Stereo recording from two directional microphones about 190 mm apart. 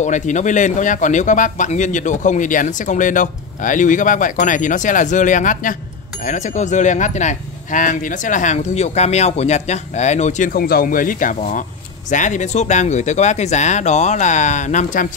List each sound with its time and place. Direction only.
0.0 s speech: 40° left (ahead or behind)